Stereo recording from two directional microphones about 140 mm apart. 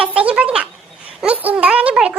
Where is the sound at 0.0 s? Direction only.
10° right (ahead or behind).